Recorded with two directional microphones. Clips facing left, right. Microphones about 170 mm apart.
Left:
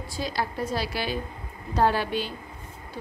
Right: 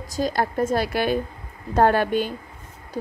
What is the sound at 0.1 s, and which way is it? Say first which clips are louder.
Speech: right 7 dB; 45° right (ahead or behind).